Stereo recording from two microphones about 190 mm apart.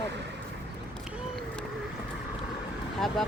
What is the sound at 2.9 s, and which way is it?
Speech, centre (ahead or behind).